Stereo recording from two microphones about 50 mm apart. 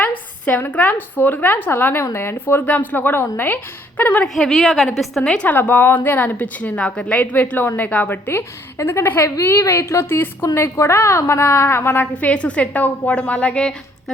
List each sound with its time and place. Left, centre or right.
0.0 s a sound: left
0.7 s speech: left
2.6 s speech: left
4.4 s a woman's voice: centre
5.5 s speech: left
8.3 s a woman's voice: left
12.1 s a woman's voice: left